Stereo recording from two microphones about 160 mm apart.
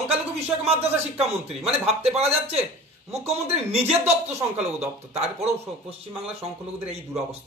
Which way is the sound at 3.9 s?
10° right (ahead or behind).